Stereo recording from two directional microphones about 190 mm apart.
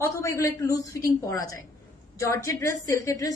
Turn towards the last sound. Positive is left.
turn(degrees=15)  # may be behind; listen again after turning